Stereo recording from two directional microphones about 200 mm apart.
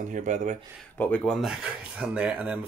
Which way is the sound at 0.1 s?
40° right (ahead or behind).